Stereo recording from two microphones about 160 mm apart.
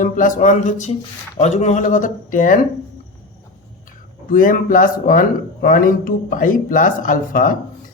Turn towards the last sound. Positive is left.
turn(degrees=60)  # may be behind; listen again after turning